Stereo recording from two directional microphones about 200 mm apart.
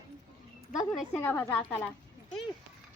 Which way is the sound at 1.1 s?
10° left (ahead or behind).